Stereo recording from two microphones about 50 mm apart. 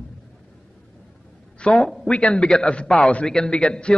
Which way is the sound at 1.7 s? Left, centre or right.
Centre.